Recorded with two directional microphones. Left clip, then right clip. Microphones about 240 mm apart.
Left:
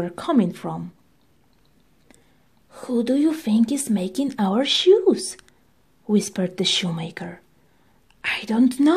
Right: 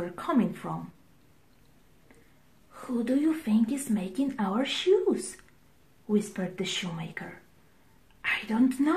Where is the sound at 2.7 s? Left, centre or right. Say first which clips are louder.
Left 7 dB; left.